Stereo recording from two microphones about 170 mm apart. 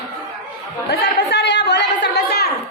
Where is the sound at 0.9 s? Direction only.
85° left.